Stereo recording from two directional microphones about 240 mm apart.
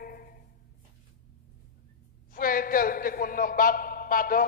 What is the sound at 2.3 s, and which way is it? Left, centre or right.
A man's voice, left.